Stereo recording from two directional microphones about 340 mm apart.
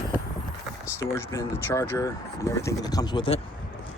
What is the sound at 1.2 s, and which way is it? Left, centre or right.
Speech, centre.